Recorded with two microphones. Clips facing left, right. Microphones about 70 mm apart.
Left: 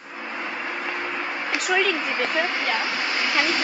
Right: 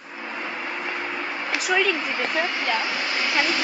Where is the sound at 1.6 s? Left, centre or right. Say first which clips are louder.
Even; centre.